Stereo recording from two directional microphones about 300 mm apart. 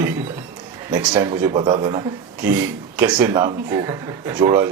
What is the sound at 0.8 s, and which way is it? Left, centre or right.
Speech, centre.